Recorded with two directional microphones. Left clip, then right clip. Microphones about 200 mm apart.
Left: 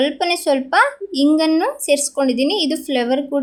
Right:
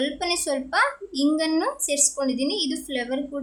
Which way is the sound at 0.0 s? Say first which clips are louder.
Left 8 dB; 25° left (ahead or behind).